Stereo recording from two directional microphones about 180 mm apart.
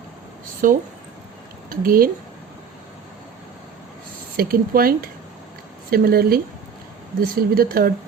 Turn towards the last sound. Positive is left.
turn(degrees=-55)  # may be behind; listen again after turning